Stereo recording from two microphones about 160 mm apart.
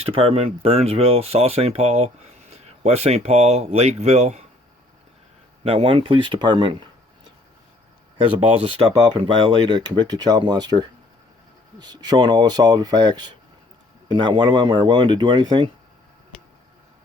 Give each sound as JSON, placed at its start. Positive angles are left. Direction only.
{"t": 0.1, "sound": "speech", "side_deg": -35}
{"t": 5.6, "sound": "speech", "side_deg": -35}
{"t": 8.2, "sound": "speech", "side_deg": -35}